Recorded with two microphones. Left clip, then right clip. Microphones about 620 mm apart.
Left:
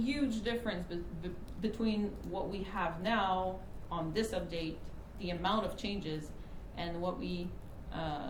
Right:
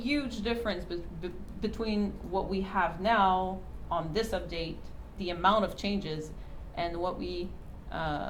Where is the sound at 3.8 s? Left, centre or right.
Right.